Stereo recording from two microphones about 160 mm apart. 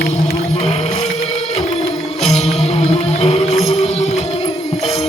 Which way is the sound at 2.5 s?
40° left (ahead or behind).